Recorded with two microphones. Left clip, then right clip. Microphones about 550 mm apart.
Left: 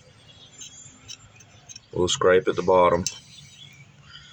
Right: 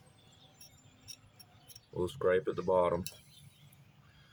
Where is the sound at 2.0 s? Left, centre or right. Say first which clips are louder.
Left 12 dB; right.